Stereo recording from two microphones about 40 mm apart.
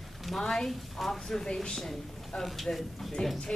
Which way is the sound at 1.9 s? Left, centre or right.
Centre.